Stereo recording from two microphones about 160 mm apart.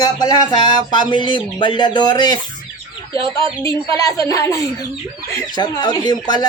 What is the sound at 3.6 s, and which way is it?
Speech, 20° left (ahead or behind).